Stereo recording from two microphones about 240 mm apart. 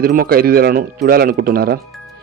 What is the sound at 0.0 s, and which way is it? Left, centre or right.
A man's voice, right.